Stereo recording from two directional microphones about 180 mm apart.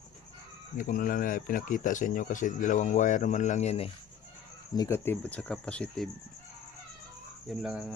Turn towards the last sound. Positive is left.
turn(degrees=-5)  # may be behind; listen again after turning